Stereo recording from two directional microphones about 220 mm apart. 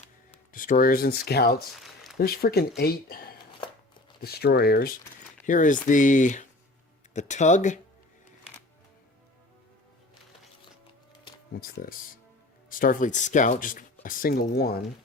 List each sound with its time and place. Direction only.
0.5 s speech: 40° left (ahead or behind)
11.5 s speech: 40° left (ahead or behind)